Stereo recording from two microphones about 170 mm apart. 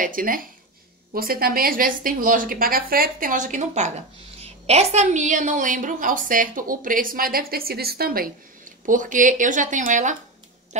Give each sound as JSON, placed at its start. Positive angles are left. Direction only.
{"t": 0.0, "sound": "a woman's voice", "side_deg": -55}